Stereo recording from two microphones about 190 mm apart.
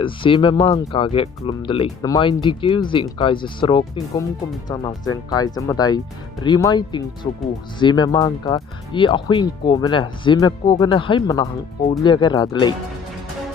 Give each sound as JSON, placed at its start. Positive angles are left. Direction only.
{"t": 0.0, "sound": "speech", "side_deg": 25}